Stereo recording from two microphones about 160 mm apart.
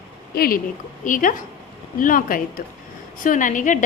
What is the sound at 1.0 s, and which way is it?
A woman's voice, 55° left (ahead or behind).